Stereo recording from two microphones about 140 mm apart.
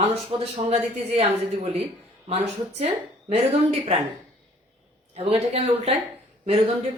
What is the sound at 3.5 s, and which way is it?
Speech, 45° right (ahead or behind).